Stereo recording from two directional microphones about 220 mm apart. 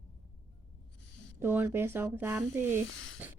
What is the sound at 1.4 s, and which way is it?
Speech, 10° right (ahead or behind).